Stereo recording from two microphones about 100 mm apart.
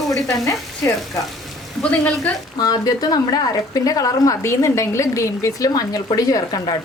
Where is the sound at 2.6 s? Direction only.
40° left (ahead or behind).